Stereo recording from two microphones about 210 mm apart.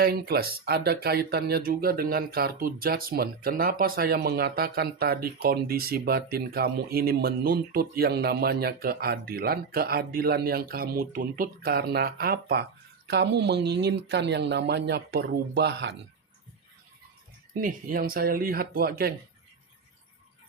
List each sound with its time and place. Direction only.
0.0 s speech: 45° right (ahead or behind)
17.5 s speech: 40° right (ahead or behind)